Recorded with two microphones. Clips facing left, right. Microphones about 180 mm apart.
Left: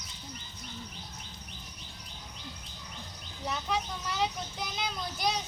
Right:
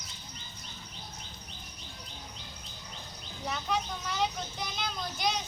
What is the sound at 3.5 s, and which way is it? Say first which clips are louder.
Vehicle: even; centre (ahead or behind).